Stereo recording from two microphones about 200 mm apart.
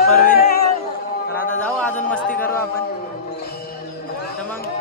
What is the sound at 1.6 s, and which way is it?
Speech, 5° left (ahead or behind).